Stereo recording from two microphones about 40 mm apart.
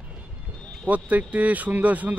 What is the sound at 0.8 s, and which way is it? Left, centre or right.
A man's voice, right.